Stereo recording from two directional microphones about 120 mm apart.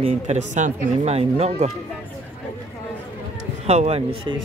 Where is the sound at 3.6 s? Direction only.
65° right (ahead or behind).